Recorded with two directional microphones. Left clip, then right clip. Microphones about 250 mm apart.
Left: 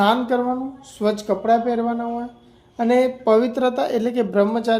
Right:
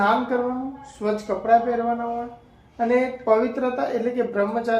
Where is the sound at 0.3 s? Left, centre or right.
Left.